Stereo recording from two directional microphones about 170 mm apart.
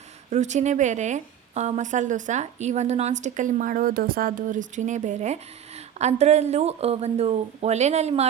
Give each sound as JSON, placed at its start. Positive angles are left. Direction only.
{"t": 0.3, "sound": "a woman's voice", "side_deg": -45}